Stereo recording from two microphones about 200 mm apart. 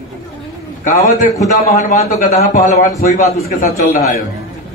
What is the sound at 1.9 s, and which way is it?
Speech, 40° left (ahead or behind).